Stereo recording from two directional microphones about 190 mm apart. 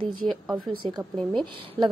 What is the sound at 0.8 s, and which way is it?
Speech, 30° right (ahead or behind).